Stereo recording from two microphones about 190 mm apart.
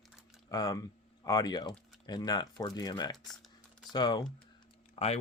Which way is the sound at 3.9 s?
20° left (ahead or behind).